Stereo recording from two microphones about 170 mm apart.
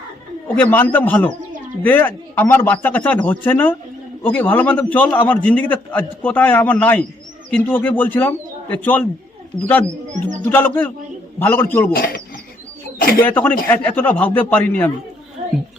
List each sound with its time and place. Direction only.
0.4 s a man's voice: 10° left (ahead or behind)
10.3 s a man's voice: 10° left (ahead or behind)
11.9 s speech: 60° left (ahead or behind)
13.2 s a man's voice: 10° left (ahead or behind)
15.4 s a sound: 45° right (ahead or behind)